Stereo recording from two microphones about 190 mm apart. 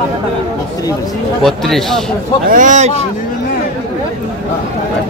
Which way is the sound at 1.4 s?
Centre (ahead or behind).